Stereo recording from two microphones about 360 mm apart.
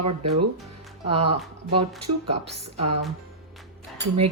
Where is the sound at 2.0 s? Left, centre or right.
Right.